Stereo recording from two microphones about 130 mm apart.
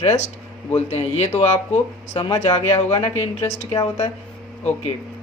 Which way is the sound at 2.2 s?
40° left (ahead or behind).